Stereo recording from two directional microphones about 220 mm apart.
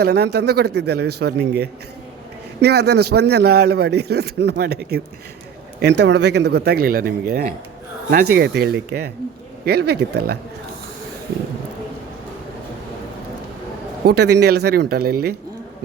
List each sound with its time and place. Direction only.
0.0 s a man's voice: 50° right (ahead or behind)
14.0 s a man's voice: 45° right (ahead or behind)